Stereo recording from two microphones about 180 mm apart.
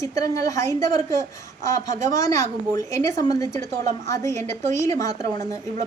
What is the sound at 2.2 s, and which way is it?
A woman's voice, 15° left (ahead or behind).